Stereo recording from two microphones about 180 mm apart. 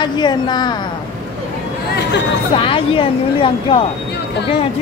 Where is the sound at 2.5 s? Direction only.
30° left (ahead or behind).